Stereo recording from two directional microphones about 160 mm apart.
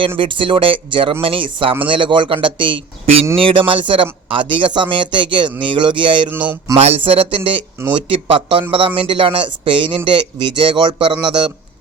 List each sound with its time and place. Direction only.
0.2 s speech: 30° right (ahead or behind)
6.3 s a sound: 10° right (ahead or behind)
6.7 s speech: 40° right (ahead or behind)